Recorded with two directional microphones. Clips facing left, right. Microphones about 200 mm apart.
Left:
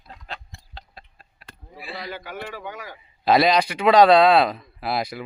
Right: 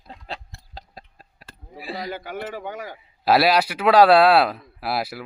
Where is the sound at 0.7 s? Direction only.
40° right (ahead or behind).